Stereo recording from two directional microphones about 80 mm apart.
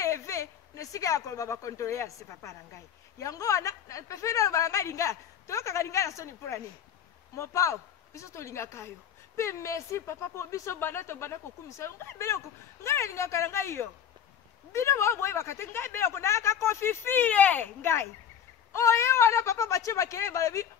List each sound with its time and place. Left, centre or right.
0.0 s a woman's voice: left; by 17.6 s centre
18.7 s speech: left